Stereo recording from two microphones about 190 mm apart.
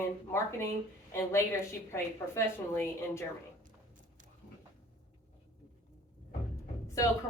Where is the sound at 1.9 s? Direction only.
15° left (ahead or behind).